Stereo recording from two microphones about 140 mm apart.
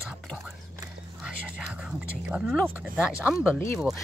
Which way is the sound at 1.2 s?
5° right (ahead or behind).